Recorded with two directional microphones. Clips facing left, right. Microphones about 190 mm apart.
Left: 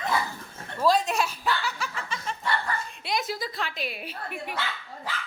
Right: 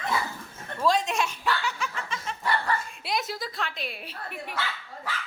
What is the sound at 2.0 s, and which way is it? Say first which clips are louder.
Snicker: even; centre (ahead or behind).